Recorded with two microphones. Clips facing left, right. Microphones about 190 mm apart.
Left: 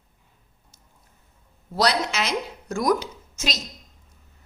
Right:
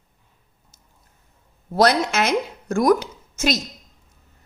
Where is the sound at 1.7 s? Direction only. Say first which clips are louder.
Right 5 dB; 50° right (ahead or behind).